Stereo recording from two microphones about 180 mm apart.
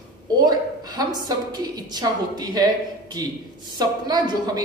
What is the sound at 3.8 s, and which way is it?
Speech, 25° right (ahead or behind).